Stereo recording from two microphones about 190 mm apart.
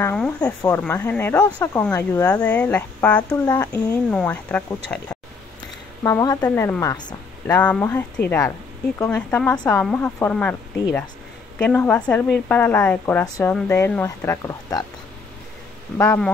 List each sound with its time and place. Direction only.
0.0 s a woman's voice: 5° left (ahead or behind)
3.4 s speech: 20° left (ahead or behind)
3.7 s a woman's voice: 5° left (ahead or behind)
6.0 s a woman's voice: 20° left (ahead or behind)
7.4 s a woman's voice: 5° left (ahead or behind)
16.0 s a woman's voice: 10° left (ahead or behind)